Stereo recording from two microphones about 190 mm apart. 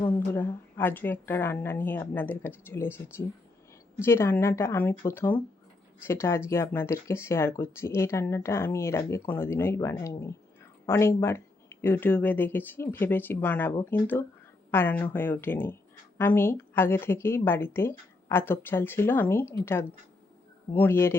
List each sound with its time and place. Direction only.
0.3 s a woman's voice: 10° left (ahead or behind)